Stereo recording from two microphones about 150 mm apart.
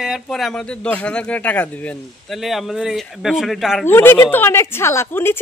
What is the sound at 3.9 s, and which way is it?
A woman's voice, 15° left (ahead or behind).